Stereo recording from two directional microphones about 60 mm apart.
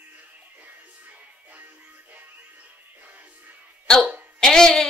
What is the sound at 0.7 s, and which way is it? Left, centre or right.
Music, right.